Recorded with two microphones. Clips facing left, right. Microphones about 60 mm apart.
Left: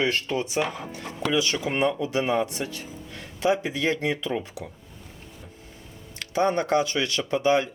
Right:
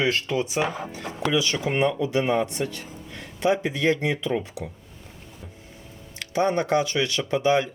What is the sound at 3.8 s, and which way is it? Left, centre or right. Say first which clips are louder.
Speech: right 2 dB; centre.